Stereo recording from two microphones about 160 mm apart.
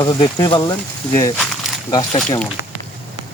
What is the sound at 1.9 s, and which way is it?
Speech, 25° left (ahead or behind).